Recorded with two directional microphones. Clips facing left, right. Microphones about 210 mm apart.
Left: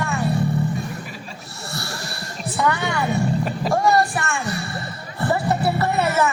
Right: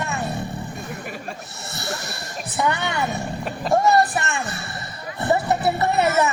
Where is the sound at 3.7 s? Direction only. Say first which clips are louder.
Right 2 dB; 20° right (ahead or behind).